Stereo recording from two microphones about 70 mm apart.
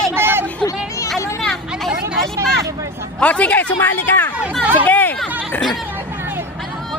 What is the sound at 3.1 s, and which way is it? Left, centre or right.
A man's voice, centre.